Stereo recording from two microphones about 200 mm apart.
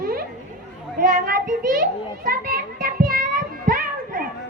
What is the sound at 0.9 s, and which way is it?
Children playing, 45° right (ahead or behind).